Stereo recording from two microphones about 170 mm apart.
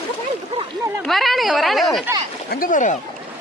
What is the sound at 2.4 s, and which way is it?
Speech, 50° left (ahead or behind).